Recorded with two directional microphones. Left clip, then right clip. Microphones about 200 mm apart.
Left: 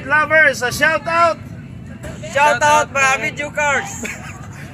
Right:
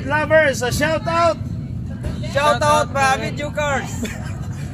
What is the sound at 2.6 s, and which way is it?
Speech, 15° left (ahead or behind).